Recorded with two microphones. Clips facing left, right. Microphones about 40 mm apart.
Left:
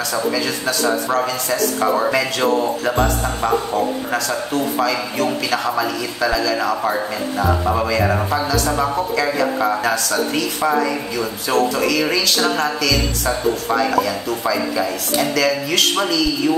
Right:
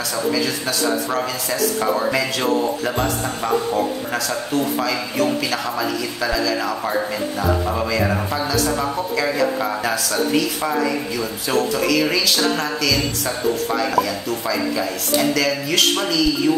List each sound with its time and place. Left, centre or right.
0.7 s speech: centre